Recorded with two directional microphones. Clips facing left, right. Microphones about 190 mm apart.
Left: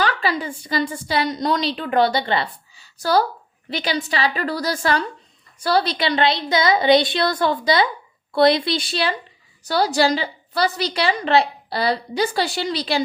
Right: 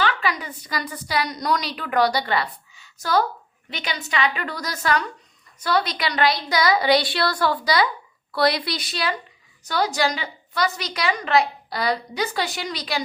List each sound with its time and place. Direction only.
0.0 s a woman's voice: 35° left (ahead or behind)